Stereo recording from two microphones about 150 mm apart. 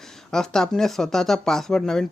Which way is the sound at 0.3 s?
5° left (ahead or behind).